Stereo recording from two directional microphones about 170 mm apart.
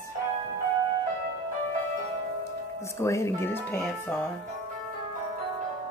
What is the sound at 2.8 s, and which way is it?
Speech, 15° left (ahead or behind).